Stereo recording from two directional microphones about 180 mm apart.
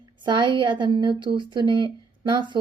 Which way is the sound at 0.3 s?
25° right (ahead or behind).